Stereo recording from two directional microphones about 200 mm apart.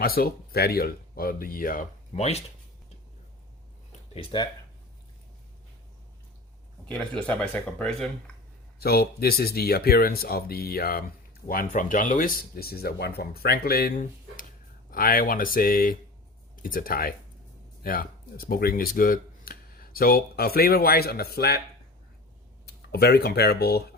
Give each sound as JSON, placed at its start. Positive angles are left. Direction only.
{"t": 0.0, "sound": "speech", "side_deg": 50}
{"t": 4.1, "sound": "speech", "side_deg": 25}
{"t": 6.8, "sound": "speech", "side_deg": 5}
{"t": 8.8, "sound": "speech", "side_deg": 50}
{"t": 22.6, "sound": "speech", "side_deg": 55}